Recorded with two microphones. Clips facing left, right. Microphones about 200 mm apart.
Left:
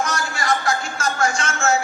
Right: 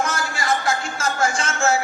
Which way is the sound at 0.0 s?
25° right (ahead or behind).